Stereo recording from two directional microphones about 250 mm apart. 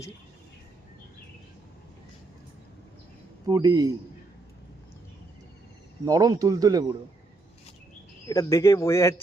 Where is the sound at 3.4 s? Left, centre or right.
Centre.